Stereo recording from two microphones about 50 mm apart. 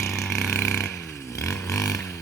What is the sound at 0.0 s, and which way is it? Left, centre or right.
Burping, left.